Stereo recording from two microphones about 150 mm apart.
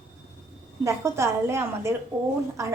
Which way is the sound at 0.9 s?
20° right (ahead or behind).